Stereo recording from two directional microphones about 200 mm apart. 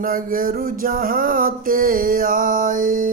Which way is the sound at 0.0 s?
45° right (ahead or behind).